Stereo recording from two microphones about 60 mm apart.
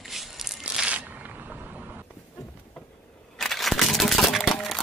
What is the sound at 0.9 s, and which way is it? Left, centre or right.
Single-lens reflex camera, right.